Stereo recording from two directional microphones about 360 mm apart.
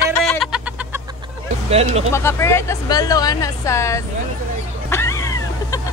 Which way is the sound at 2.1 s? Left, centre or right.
Centre.